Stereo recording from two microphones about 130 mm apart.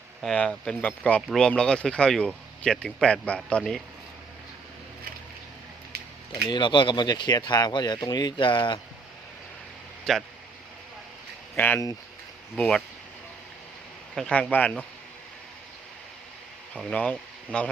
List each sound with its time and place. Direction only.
0.2 s speech: 5° left (ahead or behind)
6.4 s speech: 35° left (ahead or behind)
10.1 s speech: 5° left (ahead or behind)
11.5 s speech: 15° left (ahead or behind)
14.2 s speech: 5° left (ahead or behind)
16.7 s speech: 10° left (ahead or behind)